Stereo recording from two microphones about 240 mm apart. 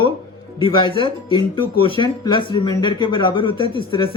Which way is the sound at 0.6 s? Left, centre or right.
Left.